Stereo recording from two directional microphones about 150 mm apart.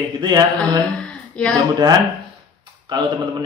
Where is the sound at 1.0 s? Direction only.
5° left (ahead or behind).